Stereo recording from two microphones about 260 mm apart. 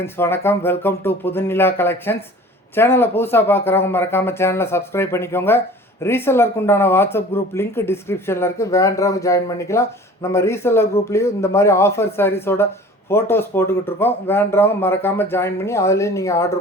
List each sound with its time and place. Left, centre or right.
0.0 s speech: centre